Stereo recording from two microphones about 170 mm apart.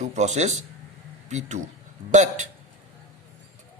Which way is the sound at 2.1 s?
45° right (ahead or behind).